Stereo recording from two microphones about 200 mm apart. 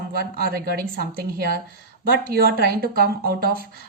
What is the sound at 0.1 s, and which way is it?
A woman's voice, 50° right (ahead or behind).